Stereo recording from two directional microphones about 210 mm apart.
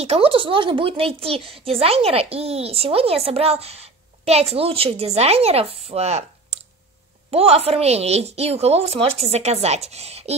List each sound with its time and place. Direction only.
0.0 s speech: 30° right (ahead or behind)